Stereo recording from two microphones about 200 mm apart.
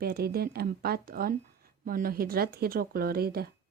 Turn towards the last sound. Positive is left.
turn(degrees=-50)  # may be behind; listen again after turning